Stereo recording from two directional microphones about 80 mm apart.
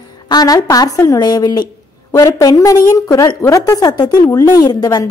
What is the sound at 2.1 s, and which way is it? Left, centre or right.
A woman's voice, left.